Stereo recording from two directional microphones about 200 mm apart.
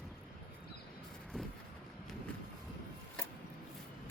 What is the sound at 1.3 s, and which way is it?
Vehicle, 5° left (ahead or behind).